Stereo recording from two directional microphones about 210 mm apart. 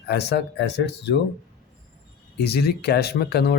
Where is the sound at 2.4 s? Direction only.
50° left (ahead or behind).